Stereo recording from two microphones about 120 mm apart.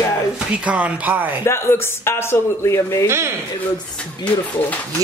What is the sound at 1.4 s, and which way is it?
Speech, 20° left (ahead or behind).